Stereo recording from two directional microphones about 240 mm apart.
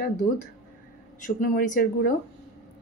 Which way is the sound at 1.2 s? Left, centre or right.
Left.